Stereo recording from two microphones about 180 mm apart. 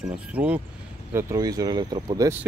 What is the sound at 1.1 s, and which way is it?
Speech, 20° right (ahead or behind).